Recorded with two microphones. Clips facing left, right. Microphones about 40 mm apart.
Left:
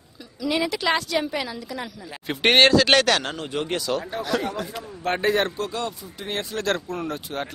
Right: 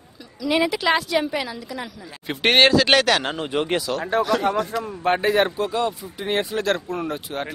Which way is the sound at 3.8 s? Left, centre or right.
Centre.